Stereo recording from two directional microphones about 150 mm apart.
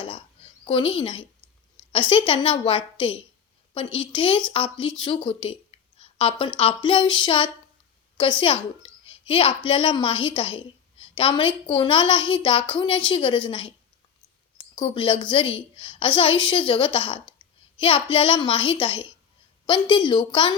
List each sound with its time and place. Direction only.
0.6 s a woman's voice: 35° left (ahead or behind)
14.8 s a woman's voice: 35° left (ahead or behind)